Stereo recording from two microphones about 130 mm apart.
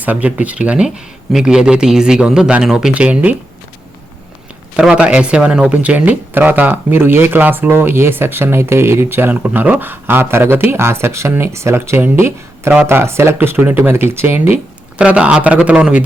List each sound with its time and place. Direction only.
0.0 s speech: 10° right (ahead or behind)
4.8 s speech: 5° right (ahead or behind)